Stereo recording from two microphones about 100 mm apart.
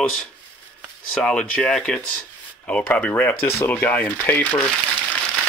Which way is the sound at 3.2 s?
20° left (ahead or behind).